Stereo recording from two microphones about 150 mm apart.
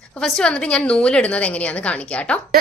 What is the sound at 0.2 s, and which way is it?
A woman's voice, 5° left (ahead or behind).